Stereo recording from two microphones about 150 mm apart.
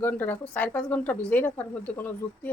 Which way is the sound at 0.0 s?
10° left (ahead or behind).